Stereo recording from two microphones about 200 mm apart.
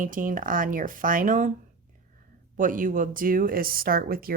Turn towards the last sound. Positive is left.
turn(degrees=-45)  # may be behind; listen again after turning